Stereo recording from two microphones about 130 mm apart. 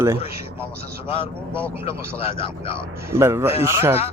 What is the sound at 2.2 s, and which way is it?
Speech, 45° left (ahead or behind).